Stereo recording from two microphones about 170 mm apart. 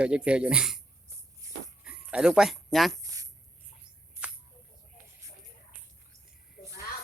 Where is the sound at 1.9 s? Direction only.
5° right (ahead or behind).